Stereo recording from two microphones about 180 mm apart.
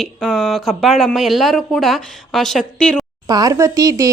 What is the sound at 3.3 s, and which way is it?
Speech, 20° right (ahead or behind).